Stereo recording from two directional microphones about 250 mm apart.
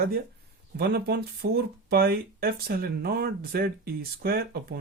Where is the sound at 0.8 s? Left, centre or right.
Right.